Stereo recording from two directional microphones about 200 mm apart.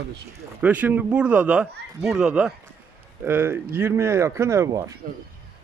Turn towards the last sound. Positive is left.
turn(degrees=-15)  # may be behind; listen again after turning